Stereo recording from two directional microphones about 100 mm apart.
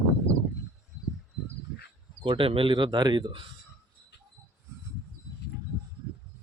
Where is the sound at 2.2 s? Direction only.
60° right (ahead or behind).